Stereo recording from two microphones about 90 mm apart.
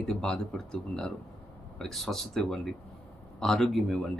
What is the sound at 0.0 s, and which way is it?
Speech, 10° left (ahead or behind).